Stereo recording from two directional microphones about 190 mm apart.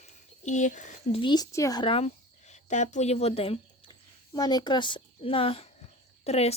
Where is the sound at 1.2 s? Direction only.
20° left (ahead or behind).